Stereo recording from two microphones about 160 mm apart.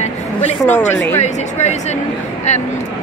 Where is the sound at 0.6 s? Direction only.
10° left (ahead or behind).